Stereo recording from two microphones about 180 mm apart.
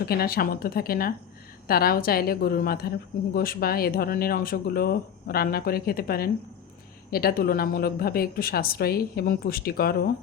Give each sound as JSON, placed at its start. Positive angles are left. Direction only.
{"t": 0.0, "sound": "speech", "side_deg": 60}